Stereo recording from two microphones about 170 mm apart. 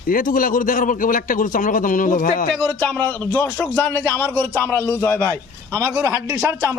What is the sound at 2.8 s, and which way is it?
Speech, 10° left (ahead or behind).